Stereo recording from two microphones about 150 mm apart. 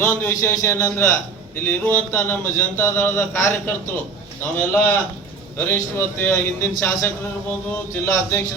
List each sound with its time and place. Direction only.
0.0 s speech: 15° left (ahead or behind)